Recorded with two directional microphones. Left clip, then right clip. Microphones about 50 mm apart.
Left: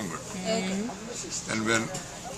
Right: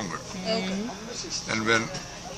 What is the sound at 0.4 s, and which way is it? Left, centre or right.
Speech, centre.